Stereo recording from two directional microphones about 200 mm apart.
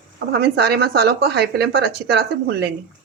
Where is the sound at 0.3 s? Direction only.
55° right (ahead or behind).